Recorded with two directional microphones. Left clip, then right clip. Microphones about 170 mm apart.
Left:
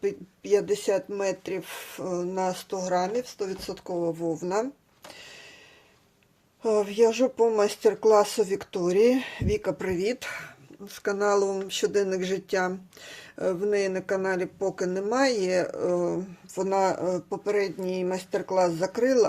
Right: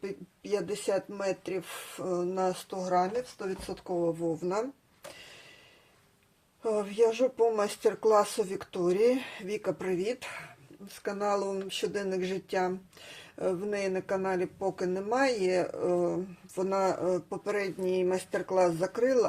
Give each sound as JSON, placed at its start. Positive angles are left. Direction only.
{"t": 0.0, "sound": "speech", "side_deg": 30}
{"t": 3.3, "sound": "speech", "side_deg": 45}
{"t": 6.6, "sound": "speech", "side_deg": 35}